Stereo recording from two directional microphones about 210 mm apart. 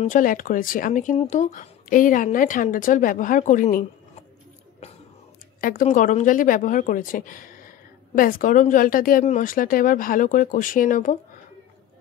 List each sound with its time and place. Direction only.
0.0 s speech: 40° left (ahead or behind)
5.6 s speech: 40° left (ahead or behind)